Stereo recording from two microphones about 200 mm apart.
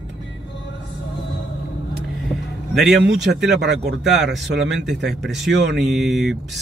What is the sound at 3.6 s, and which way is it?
Speech, 60° right (ahead or behind).